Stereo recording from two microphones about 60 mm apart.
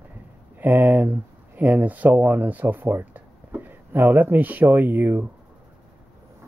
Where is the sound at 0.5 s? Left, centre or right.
Right.